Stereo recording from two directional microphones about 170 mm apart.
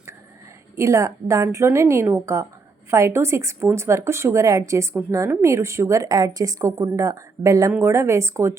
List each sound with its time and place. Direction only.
0.8 s speech: 15° right (ahead or behind)